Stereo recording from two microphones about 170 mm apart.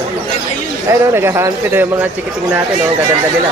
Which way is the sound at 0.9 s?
15° right (ahead or behind).